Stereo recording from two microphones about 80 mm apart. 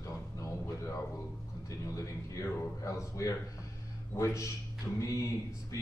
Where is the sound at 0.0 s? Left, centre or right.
Left.